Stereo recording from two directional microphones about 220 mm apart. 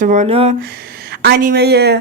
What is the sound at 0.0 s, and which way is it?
Speech, 35° right (ahead or behind).